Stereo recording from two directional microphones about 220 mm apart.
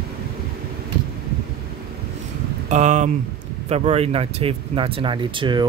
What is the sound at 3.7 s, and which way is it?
Speech, 30° right (ahead or behind).